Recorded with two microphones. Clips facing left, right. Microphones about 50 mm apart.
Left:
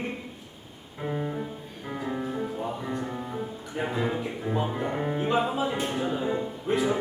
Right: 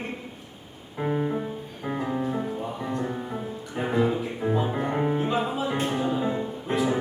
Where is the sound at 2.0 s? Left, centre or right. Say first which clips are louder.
Right 1 dB; centre.